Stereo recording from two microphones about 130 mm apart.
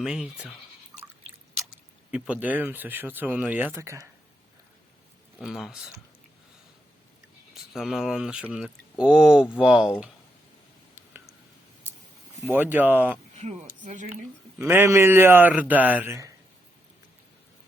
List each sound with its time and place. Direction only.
0.0 s speech: 5° right (ahead or behind)
2.0 s speech: 10° right (ahead or behind)
5.4 s speech: centre (ahead or behind)
7.5 s speech: centre (ahead or behind)
12.5 s speech: 15° right (ahead or behind)
13.3 s speech: 60° right (ahead or behind)
14.6 s speech: 20° right (ahead or behind)